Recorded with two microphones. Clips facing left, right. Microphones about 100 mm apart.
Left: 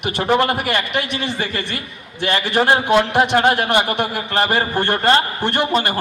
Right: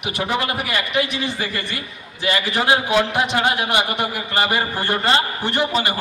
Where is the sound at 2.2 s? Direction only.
60° left (ahead or behind).